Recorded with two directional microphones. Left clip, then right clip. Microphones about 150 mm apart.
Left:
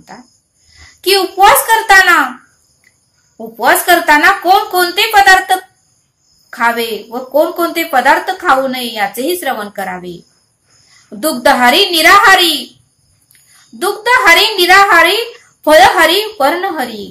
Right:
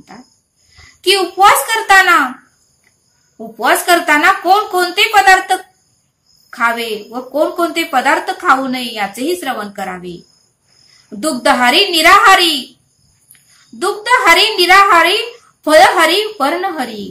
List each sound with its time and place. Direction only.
0.1 s a woman's voice: 20° left (ahead or behind)
1.4 s a woman's voice: 20° left (ahead or behind)
3.5 s a woman's voice: 20° left (ahead or behind)
11.4 s a woman's voice: 25° left (ahead or behind)
13.7 s a woman's voice: 20° left (ahead or behind)